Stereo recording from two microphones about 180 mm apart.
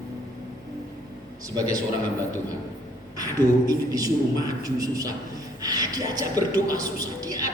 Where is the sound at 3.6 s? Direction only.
20° right (ahead or behind).